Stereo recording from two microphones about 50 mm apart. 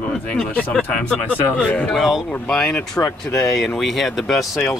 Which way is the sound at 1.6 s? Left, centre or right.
Left.